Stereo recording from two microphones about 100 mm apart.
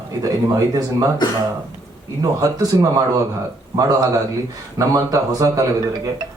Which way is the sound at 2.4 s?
40° right (ahead or behind).